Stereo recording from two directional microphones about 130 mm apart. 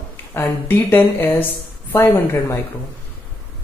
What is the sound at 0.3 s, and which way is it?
A woman's voice, 15° left (ahead or behind).